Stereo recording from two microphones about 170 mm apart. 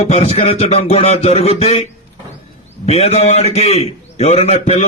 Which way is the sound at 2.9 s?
35° left (ahead or behind).